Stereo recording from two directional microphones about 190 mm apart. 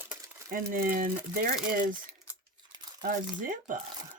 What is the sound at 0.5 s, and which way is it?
Speech, 45° right (ahead or behind).